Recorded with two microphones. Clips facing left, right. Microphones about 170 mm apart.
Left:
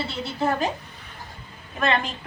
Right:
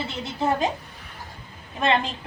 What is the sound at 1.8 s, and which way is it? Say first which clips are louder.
Speech: right 1 dB; 25° right (ahead or behind).